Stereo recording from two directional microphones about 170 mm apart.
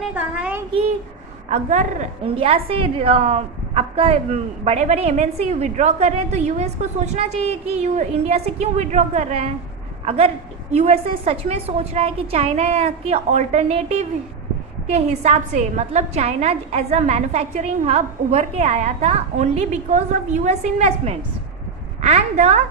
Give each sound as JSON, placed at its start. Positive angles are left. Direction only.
{"t": 0.1, "sound": "a child's voice", "side_deg": -10}
{"t": 1.5, "sound": "a woman's voice", "side_deg": -45}
{"t": 2.2, "sound": "a woman's voice", "side_deg": -30}